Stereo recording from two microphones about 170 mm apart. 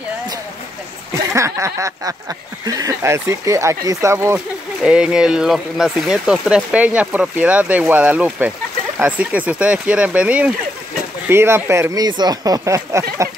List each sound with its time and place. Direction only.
1.3 s speech: 15° right (ahead or behind)